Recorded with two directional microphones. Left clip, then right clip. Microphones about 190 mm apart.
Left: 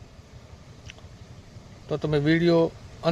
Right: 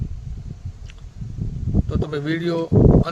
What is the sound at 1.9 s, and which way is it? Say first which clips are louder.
Speech: left 3 dB; 20° right (ahead or behind).